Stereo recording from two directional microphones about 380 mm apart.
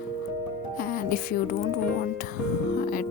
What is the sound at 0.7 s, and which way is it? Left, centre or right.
Music, left.